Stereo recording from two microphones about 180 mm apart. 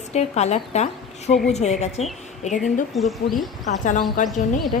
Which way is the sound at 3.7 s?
45° left (ahead or behind).